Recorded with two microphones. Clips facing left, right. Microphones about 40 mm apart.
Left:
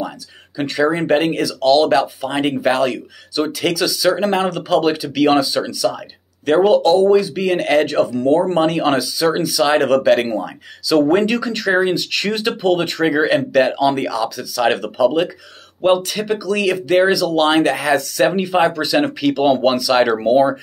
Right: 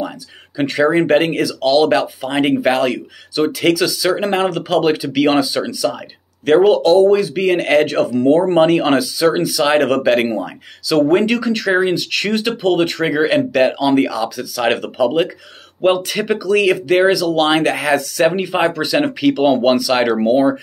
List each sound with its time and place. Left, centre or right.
0.6 s speech: centre